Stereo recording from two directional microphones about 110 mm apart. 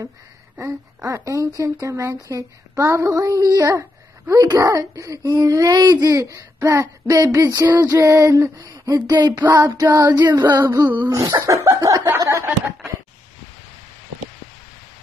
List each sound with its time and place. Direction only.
0.6 s speech: 25° right (ahead or behind)
5.4 s child singing: 30° right (ahead or behind)
7.3 s speech: 30° right (ahead or behind)
9.6 s child singing: 35° right (ahead or behind)
10.6 s speech: 25° right (ahead or behind)
11.1 s child singing: 35° right (ahead or behind)
12.2 s speech: 25° right (ahead or behind)